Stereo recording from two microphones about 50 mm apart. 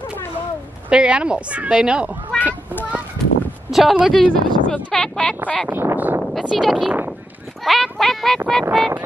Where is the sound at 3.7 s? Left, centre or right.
Centre.